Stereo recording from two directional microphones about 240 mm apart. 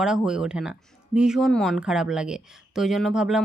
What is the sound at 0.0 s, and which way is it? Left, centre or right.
Speech, centre.